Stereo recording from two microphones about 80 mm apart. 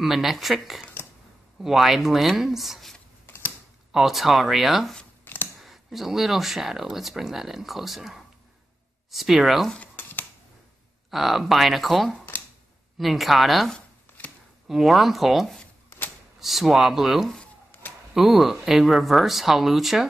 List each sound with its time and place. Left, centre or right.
0.0 s speech: centre
5.2 s a sound: left
5.6 s speech: centre
9.8 s a sound: left
11.1 s speech: centre
13.7 s chopping: centre
14.7 s speech: centre